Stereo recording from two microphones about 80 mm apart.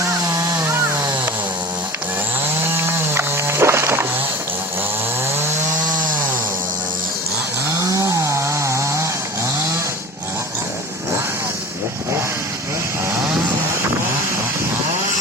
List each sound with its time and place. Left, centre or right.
0.3 s chainsaw: right
2.7 s a sound: right
7.7 s chainsaw: right